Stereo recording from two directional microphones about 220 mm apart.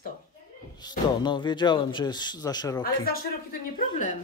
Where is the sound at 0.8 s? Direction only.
20° left (ahead or behind).